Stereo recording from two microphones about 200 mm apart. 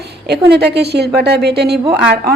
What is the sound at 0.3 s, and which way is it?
A woman's voice, 55° right (ahead or behind).